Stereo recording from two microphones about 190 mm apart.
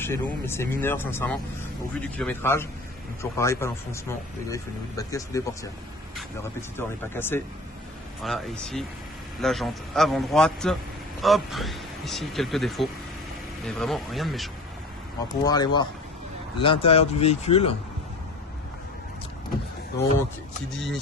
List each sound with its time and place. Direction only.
0.0 s speech: 10° left (ahead or behind)
8.2 s speech: centre (ahead or behind)
15.4 s speech: 20° left (ahead or behind)
20.7 s speech: centre (ahead or behind)